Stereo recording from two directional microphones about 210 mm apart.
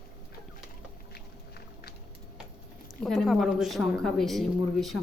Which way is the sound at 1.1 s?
50° left (ahead or behind).